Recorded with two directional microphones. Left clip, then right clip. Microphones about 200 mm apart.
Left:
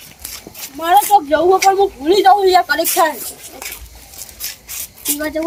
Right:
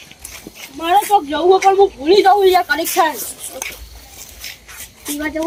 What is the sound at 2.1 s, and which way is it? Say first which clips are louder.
Speech: left 1 dB; 15° left (ahead or behind).